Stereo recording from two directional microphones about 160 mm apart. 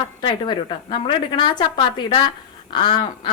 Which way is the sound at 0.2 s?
30° left (ahead or behind).